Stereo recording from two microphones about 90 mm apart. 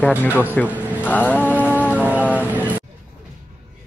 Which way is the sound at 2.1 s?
20° left (ahead or behind).